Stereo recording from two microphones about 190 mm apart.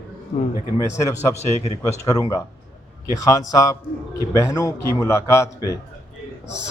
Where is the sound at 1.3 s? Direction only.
35° left (ahead or behind).